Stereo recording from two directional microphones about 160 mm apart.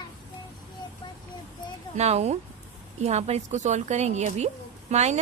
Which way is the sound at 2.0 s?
40° right (ahead or behind).